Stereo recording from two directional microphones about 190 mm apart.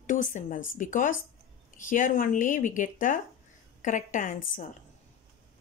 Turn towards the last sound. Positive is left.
turn(degrees=45)  # may be behind; listen again after turning